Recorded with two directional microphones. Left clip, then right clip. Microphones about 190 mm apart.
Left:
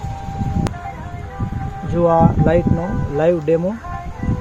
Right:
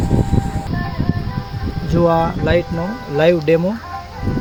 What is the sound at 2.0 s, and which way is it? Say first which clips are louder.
Speech: left 1 dB; 10° right (ahead or behind).